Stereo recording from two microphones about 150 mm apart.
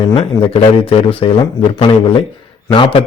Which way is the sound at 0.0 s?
35° left (ahead or behind).